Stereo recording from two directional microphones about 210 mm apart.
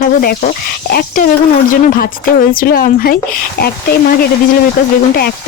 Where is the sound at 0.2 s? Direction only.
45° left (ahead or behind).